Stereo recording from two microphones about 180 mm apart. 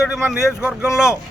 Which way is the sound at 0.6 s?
5° right (ahead or behind).